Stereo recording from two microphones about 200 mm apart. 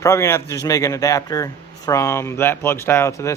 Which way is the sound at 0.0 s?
15° left (ahead or behind).